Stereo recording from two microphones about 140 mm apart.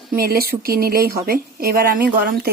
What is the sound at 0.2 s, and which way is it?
Speech, 90° right.